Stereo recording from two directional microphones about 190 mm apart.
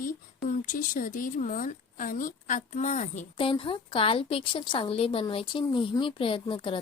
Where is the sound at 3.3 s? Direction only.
30° left (ahead or behind).